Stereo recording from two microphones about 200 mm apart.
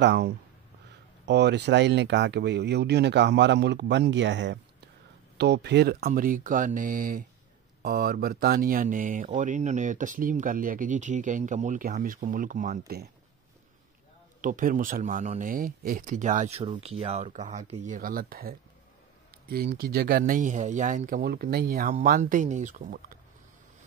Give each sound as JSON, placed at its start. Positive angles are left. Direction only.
{"t": 0.0, "sound": "speech", "side_deg": -60}
{"t": 14.4, "sound": "speech", "side_deg": -40}